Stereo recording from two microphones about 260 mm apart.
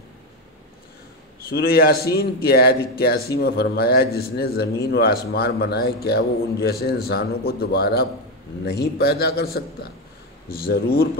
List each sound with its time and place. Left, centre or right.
1.5 s speech: left